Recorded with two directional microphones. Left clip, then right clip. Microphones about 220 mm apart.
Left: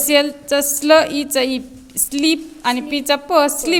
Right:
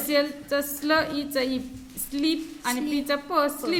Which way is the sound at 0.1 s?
40° left (ahead or behind).